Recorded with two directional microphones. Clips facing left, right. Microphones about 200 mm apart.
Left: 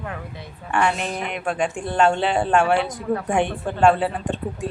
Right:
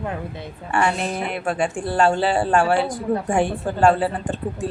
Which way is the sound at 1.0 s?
35° right (ahead or behind).